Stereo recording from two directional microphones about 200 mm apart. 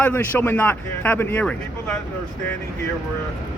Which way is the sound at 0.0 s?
10° left (ahead or behind).